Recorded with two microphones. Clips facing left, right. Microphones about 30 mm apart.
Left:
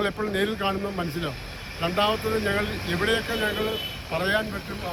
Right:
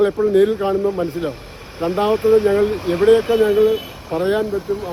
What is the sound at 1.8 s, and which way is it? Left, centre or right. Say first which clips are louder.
Speech: right 7 dB; left.